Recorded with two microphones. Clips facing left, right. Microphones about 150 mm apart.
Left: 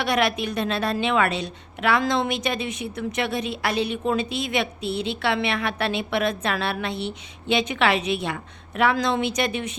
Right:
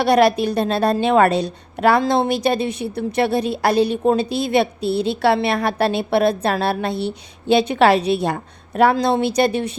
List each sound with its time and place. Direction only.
0.0 s a woman's voice: 35° right (ahead or behind)